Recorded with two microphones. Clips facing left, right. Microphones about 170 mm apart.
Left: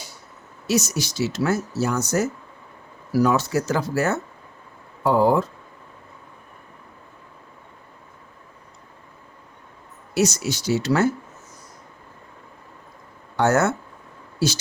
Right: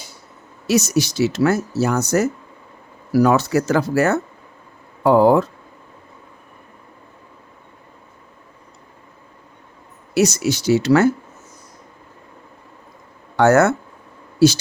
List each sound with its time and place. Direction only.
0.7 s speech: 70° right (ahead or behind)
10.2 s speech: 70° right (ahead or behind)
13.3 s speech: 75° right (ahead or behind)